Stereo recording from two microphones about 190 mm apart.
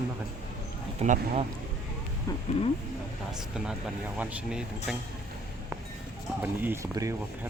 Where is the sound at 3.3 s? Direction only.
5° right (ahead or behind).